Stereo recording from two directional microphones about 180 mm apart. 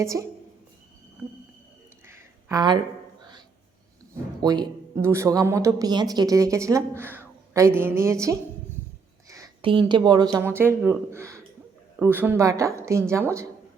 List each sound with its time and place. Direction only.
0.0 s a woman's voice: 15° right (ahead or behind)
2.0 s a sound: 20° right (ahead or behind)
4.4 s a woman's voice: 25° right (ahead or behind)
9.6 s a woman's voice: 30° right (ahead or behind)